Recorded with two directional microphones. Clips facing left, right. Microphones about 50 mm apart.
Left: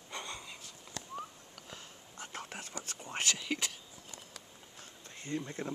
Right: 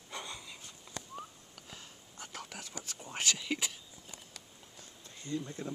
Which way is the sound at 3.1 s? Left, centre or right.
Left.